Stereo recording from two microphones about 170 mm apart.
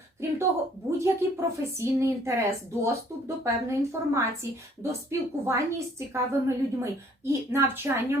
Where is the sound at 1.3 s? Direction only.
15° right (ahead or behind).